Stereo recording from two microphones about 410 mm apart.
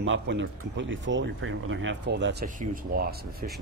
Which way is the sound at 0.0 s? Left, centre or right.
Right.